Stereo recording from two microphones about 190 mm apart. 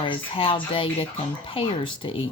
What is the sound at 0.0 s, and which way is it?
Speech, 25° left (ahead or behind).